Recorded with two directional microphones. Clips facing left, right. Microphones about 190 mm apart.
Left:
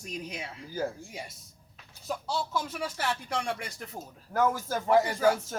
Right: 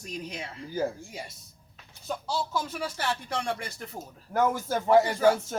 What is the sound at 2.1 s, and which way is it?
Speech, centre (ahead or behind).